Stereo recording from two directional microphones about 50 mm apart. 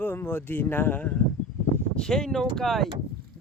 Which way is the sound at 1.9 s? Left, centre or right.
Centre.